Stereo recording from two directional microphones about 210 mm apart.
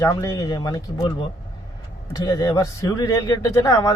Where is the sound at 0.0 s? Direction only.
15° left (ahead or behind).